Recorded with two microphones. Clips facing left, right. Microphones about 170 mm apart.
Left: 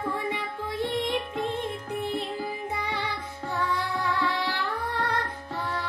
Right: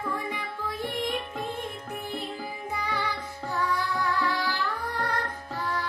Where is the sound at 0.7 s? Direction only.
25° left (ahead or behind).